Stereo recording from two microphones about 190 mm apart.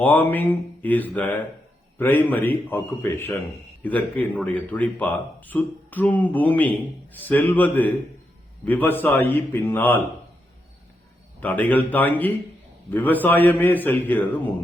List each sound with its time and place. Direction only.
0.0 s speech: 10° left (ahead or behind)
11.3 s speech: 10° left (ahead or behind)